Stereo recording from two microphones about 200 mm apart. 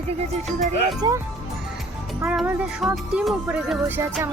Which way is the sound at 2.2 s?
10° right (ahead or behind).